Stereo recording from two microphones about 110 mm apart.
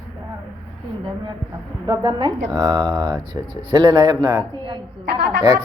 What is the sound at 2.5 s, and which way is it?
Speech, 40° right (ahead or behind).